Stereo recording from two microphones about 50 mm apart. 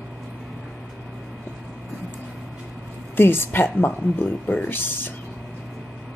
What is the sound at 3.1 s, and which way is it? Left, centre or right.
Speech, left.